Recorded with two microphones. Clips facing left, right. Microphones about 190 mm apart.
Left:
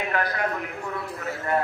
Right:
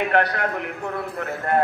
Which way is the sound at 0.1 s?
65° right (ahead or behind).